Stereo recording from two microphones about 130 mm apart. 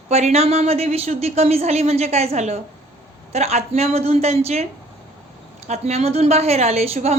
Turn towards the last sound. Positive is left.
turn(degrees=-55)  # may be behind; listen again after turning